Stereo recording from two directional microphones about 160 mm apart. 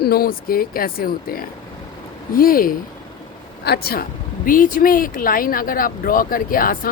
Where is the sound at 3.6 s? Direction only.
75° left (ahead or behind).